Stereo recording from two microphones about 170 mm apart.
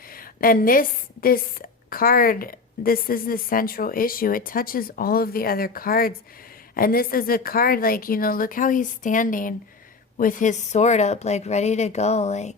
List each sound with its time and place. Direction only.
0.1 s a woman's voice: 55° left (ahead or behind); by 12.5 s 40° left (ahead or behind)